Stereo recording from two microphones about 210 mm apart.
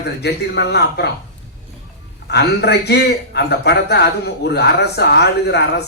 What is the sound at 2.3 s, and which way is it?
Speech, 50° left (ahead or behind).